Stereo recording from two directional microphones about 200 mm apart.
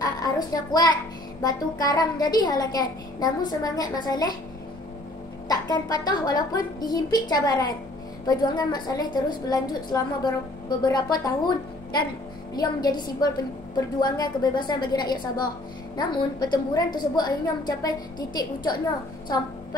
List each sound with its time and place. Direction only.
0.0 s a sound: 20° left (ahead or behind)
1.4 s a woman's voice: 20° left (ahead or behind)
5.5 s a woman's voice: 20° left (ahead or behind)